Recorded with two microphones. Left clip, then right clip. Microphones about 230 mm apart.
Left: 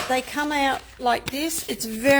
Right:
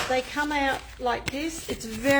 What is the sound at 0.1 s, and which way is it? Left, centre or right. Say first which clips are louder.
Speech: left 4 dB; left.